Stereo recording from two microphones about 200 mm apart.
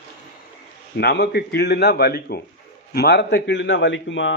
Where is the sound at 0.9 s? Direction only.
55° left (ahead or behind).